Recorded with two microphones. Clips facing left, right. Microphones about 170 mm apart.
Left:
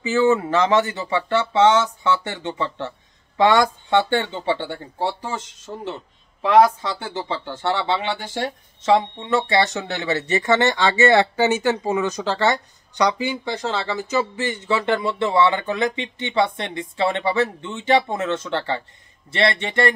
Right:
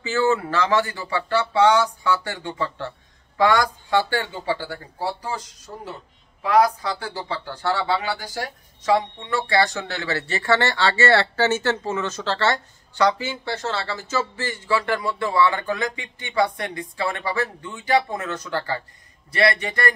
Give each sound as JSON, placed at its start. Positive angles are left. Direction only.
{"t": 0.0, "sound": "speech", "side_deg": 20}